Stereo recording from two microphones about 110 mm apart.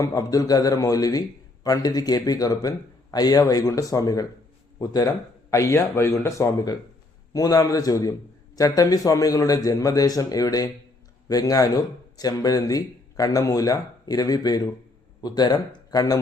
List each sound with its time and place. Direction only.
0.0 s a man's voice: 35° left (ahead or behind)